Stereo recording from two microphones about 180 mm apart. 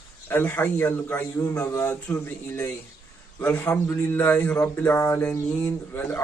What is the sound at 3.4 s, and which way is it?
A man's voice, 10° left (ahead or behind).